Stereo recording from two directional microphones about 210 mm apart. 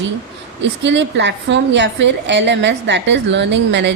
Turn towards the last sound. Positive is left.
turn(degrees=-55)  # may be behind; listen again after turning